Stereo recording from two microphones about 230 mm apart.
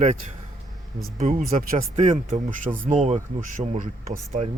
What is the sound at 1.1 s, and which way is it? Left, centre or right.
Speech, right.